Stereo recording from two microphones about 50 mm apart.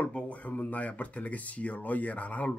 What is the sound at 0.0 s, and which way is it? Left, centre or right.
Speech, left.